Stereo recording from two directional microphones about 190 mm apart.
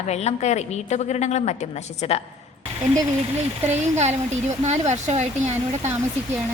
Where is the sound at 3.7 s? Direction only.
35° right (ahead or behind).